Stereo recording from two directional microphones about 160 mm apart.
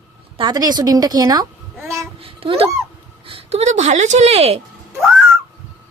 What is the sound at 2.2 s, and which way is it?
A child's voice, 35° right (ahead or behind).